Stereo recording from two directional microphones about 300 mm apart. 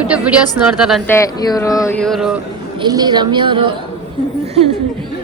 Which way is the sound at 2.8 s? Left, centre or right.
Centre.